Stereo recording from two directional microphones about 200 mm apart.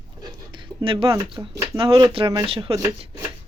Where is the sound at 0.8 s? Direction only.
25° right (ahead or behind).